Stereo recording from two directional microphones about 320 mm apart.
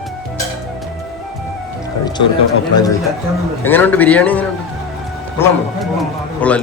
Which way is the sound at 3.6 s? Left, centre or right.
Centre.